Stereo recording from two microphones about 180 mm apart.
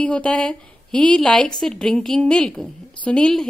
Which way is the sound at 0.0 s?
5° left (ahead or behind).